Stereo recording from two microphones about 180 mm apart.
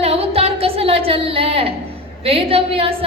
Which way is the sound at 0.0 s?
35° right (ahead or behind).